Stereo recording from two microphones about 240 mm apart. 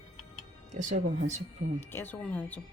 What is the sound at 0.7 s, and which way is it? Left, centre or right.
Speech, right.